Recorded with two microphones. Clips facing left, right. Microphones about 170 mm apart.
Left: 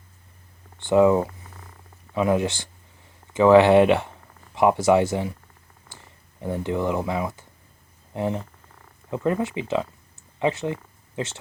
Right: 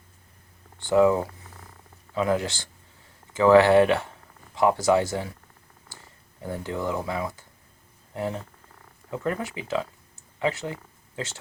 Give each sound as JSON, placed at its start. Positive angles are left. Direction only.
{"t": 0.8, "sound": "speech", "side_deg": 20}
{"t": 6.4, "sound": "speech", "side_deg": 20}